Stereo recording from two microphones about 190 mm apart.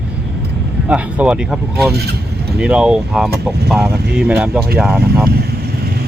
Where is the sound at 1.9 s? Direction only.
60° right (ahead or behind).